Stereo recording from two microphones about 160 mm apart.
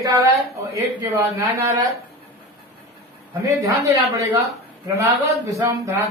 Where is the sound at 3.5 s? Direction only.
20° right (ahead or behind).